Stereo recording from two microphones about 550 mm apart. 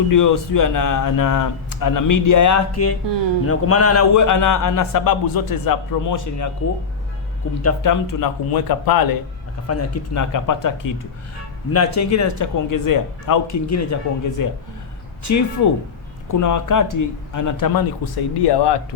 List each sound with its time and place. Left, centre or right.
0.1 s a man's voice: left
7.6 s a man's voice: left
9.6 s a man's voice: left